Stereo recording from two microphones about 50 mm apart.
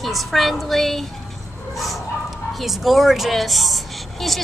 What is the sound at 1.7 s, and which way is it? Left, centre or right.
Bow-wow, centre.